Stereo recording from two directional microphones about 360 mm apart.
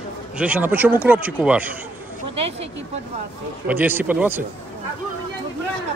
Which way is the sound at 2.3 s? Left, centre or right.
Centre.